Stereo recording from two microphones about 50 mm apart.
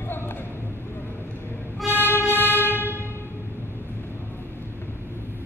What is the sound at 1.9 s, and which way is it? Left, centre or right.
Music, left.